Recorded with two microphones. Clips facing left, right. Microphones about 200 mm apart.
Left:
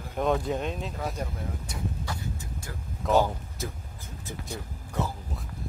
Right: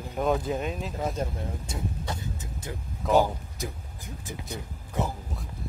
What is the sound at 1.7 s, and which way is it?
Vehicle, 20° right (ahead or behind).